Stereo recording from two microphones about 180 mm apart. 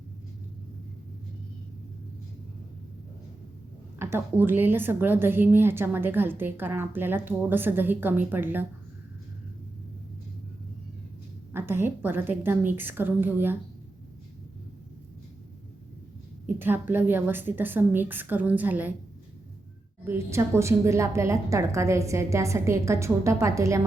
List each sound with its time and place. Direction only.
3.9 s a woman's voice: 15° right (ahead or behind)
11.5 s a woman's voice: 10° right (ahead or behind)
16.6 s a woman's voice: 10° right (ahead or behind)
20.1 s a woman's voice: 15° right (ahead or behind)